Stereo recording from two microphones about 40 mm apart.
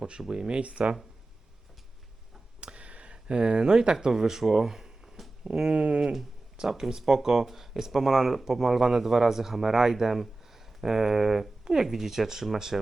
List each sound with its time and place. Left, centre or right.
0.0 s speech: centre
2.6 s a sound: right
4.0 s speech: centre
5.6 s speech: right
6.6 s speech: centre